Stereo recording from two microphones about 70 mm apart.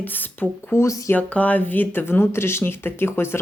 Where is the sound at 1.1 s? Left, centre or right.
Left.